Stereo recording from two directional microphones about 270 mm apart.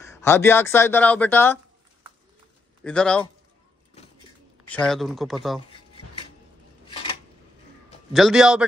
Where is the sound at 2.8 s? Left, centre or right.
Centre.